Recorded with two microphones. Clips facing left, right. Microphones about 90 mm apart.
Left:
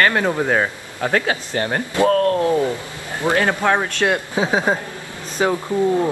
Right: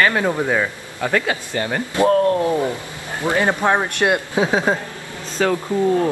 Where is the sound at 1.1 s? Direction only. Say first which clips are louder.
Left 1 dB; 35° left (ahead or behind).